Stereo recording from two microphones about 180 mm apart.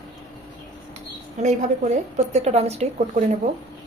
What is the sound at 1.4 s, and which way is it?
A woman's voice, 40° right (ahead or behind).